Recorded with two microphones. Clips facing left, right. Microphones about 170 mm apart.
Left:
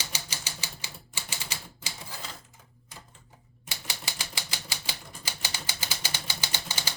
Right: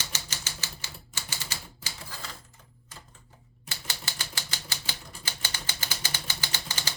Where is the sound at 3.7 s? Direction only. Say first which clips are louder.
Left 1 dB; 15° left (ahead or behind).